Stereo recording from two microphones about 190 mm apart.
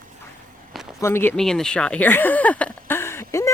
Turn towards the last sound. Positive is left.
turn(degrees=15)  # may be behind; listen again after turning